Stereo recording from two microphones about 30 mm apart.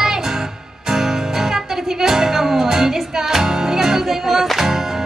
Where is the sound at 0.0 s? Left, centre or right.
Centre.